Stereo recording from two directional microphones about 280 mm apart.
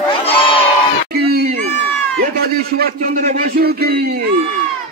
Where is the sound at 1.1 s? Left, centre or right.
Right.